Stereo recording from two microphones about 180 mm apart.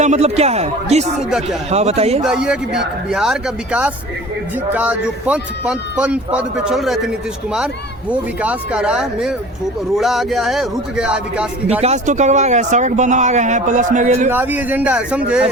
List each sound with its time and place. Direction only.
0.0 s speech: 40° right (ahead or behind)
1.3 s speech: centre (ahead or behind)
1.7 s speech: 35° right (ahead or behind)
2.2 s a man's voice: 5° right (ahead or behind)
8.1 s speech: 5° right (ahead or behind)
11.8 s speech: 40° right (ahead or behind)
14.3 s a man's voice: 10° right (ahead or behind)